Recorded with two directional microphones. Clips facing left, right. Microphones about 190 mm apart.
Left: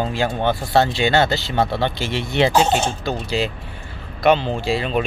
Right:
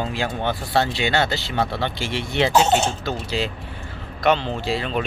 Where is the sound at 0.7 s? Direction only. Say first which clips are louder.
Left 4 dB; 45° left (ahead or behind).